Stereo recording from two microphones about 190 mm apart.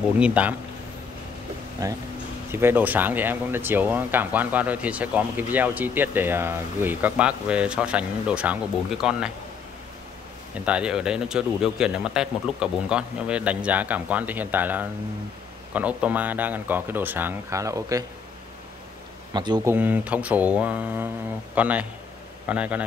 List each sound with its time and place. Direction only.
0.2 s speech: 5° right (ahead or behind)
1.8 s speech: 20° right (ahead or behind); by 9.3 s 5° right (ahead or behind)
10.5 s speech: 5° right (ahead or behind)
19.3 s speech: 20° right (ahead or behind)
19.7 s speech: 10° right (ahead or behind)